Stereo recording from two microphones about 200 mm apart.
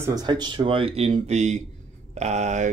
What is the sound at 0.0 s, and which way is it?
Speech, 20° right (ahead or behind).